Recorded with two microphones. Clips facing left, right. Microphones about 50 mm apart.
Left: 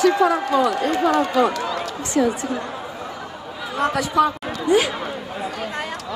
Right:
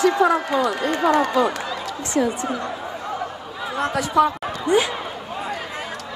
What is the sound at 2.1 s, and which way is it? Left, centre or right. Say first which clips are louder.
Speech: left 1 dB; right.